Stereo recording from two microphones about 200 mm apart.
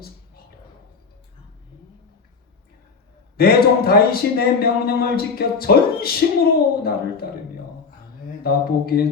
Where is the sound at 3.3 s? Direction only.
50° left (ahead or behind).